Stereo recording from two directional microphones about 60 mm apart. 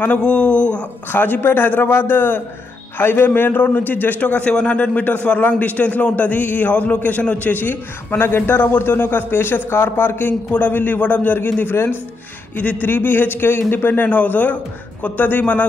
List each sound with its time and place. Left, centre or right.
0.0 s a man's voice: left
1.1 s a man's voice: left